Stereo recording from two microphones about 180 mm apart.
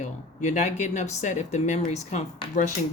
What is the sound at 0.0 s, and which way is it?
Speech, 40° left (ahead or behind).